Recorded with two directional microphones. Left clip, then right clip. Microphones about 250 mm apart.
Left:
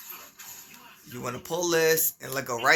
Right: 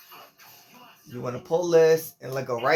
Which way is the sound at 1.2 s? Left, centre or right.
Left.